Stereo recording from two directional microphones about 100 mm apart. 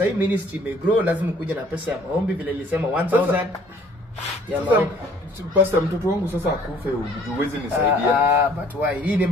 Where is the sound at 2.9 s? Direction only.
15° right (ahead or behind).